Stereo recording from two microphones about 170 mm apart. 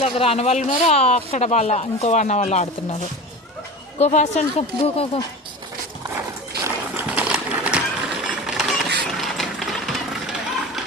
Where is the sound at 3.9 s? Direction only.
40° left (ahead or behind).